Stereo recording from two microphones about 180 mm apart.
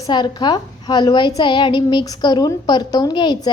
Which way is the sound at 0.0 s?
25° left (ahead or behind).